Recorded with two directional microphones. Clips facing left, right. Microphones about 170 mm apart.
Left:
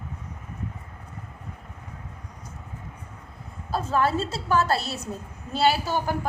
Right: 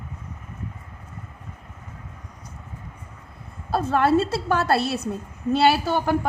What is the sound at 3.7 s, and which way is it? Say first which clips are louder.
A woman's voice: right 4 dB; 60° right (ahead or behind).